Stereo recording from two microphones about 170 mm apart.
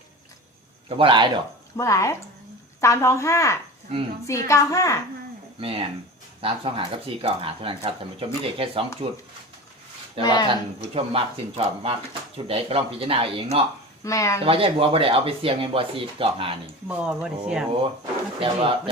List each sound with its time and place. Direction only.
0.9 s a man's voice: 30° right (ahead or behind)
1.7 s a woman's voice: 15° left (ahead or behind)
5.5 s speech: 30° right (ahead or behind)
10.2 s a woman's voice: 25° left (ahead or behind)
10.9 s speech: 35° right (ahead or behind)
14.0 s speech: 20° left (ahead or behind)
14.4 s speech: 35° right (ahead or behind)
17.0 s speech: 5° right (ahead or behind)
17.7 s speech: 30° right (ahead or behind)